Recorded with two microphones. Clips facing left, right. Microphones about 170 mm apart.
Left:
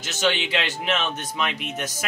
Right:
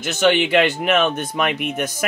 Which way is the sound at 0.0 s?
55° right (ahead or behind).